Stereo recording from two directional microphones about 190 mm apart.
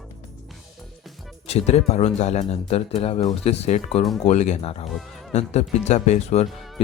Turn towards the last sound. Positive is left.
turn(degrees=0)  # may be behind; listen again after turning